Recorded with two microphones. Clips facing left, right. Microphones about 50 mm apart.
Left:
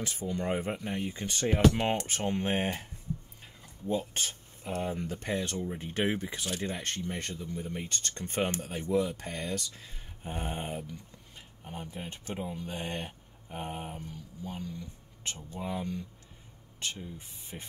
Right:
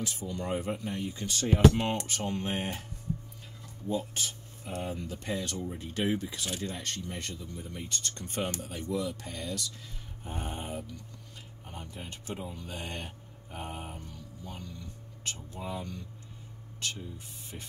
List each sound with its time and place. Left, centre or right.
0.0 s speech: left
3.9 s speech: left
5.4 s speech: left
11.6 s speech: centre
13.7 s a sound: centre
14.4 s speech: left
17.5 s speech: left